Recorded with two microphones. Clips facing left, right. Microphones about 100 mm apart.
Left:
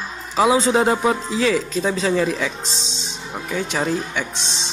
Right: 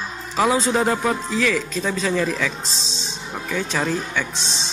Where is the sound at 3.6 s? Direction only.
20° left (ahead or behind).